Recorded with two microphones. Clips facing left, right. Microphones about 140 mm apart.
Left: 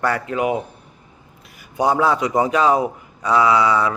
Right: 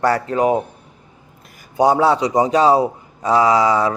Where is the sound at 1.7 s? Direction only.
35° right (ahead or behind).